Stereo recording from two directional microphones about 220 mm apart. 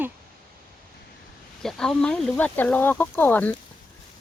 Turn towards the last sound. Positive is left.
turn(degrees=10)  # may be behind; listen again after turning